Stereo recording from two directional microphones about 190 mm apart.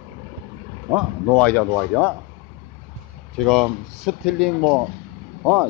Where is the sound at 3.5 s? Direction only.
Centre (ahead or behind).